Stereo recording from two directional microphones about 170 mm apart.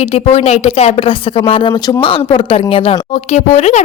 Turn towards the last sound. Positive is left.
turn(degrees=40)  # may be behind; listen again after turning